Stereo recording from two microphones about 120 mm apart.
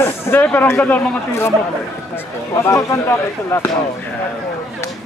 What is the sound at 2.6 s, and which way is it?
Speech, 25° left (ahead or behind).